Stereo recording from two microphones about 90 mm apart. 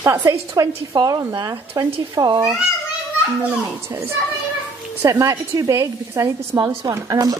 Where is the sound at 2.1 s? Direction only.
50° right (ahead or behind).